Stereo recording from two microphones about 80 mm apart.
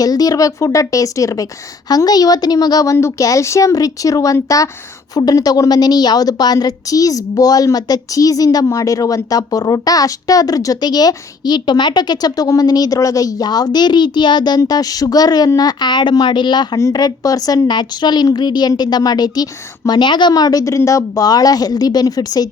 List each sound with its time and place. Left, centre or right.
0.0 s a woman's voice: left
2.0 s a woman's voice: left
14.7 s a woman's voice: left
16.9 s a woman's voice: left